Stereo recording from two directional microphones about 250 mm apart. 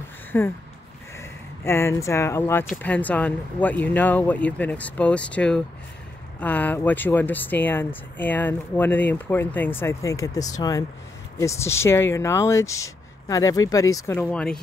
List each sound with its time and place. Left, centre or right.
0.3 s speech: centre
1.6 s speech: centre